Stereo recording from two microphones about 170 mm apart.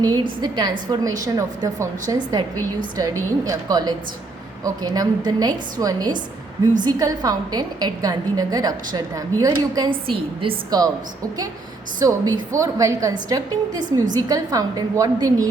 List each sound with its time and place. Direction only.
0.0 s a woman's voice: 25° right (ahead or behind)
3.4 s a woman's voice: 20° right (ahead or behind)
11.9 s a woman's voice: 25° right (ahead or behind)